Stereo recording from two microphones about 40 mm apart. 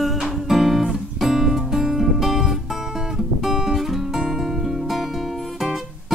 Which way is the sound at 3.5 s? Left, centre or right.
Centre.